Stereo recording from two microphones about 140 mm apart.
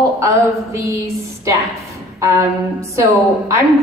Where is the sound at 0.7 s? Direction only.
20° right (ahead or behind).